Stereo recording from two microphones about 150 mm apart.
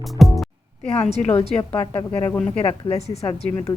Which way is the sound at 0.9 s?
45° left (ahead or behind).